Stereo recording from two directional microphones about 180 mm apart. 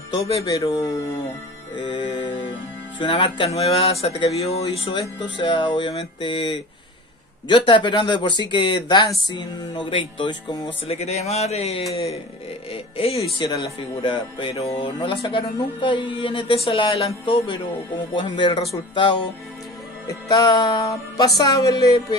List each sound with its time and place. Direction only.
0.4 s speech: 20° left (ahead or behind)
20.1 s speech: 20° left (ahead or behind)